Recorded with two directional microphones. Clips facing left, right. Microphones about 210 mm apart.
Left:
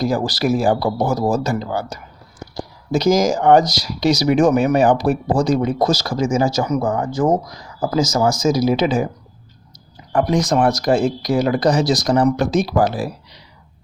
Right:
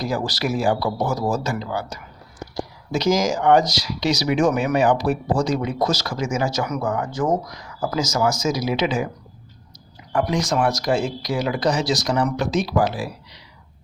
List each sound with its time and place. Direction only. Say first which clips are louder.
0.0 s speech: left 5 dB; 35° left (ahead or behind)
10.1 s speech: left 4 dB; 40° left (ahead or behind)